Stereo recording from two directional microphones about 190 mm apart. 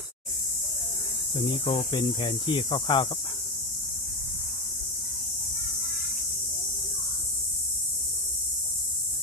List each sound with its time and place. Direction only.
1.3 s speech: 30° left (ahead or behind)